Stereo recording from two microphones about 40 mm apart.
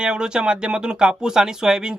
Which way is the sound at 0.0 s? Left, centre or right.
Centre.